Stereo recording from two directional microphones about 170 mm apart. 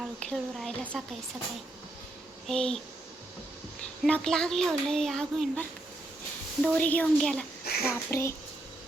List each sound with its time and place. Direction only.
0.0 s a child's voice: 5° left (ahead or behind)
2.5 s a child's voice: 5° left (ahead or behind)
4.0 s a child's voice: centre (ahead or behind)
6.7 s speech: 10° left (ahead or behind)
7.6 s a sound: 65° left (ahead or behind)
7.9 s speech: 15° left (ahead or behind)